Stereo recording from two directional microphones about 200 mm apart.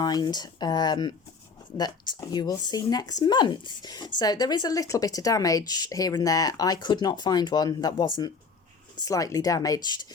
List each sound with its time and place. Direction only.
0.0 s speech: 20° left (ahead or behind)